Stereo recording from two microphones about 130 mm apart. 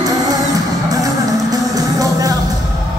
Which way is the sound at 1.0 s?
25° right (ahead or behind).